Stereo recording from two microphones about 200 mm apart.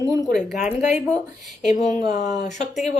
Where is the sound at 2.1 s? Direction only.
35° left (ahead or behind).